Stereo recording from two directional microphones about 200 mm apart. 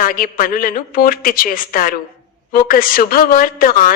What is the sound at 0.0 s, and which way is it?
A woman's voice, 45° left (ahead or behind).